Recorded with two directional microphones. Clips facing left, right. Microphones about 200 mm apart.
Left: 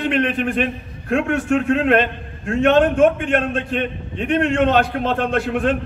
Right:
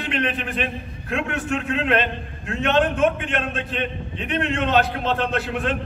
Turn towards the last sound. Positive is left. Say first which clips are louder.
# left 5 dB
turn(degrees=45)  # may be behind; listen again after turning